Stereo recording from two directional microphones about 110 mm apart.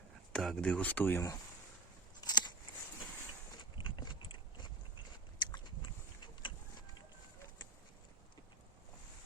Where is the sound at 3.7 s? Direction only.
45° left (ahead or behind).